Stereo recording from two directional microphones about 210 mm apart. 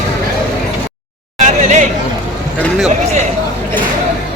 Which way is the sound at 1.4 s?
35° right (ahead or behind).